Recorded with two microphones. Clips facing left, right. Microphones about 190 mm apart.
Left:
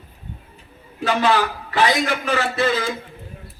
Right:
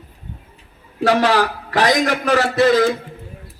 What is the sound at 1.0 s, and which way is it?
A man's voice, 70° right (ahead or behind).